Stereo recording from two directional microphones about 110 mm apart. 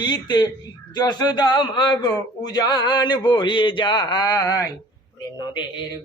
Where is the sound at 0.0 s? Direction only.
40° left (ahead or behind).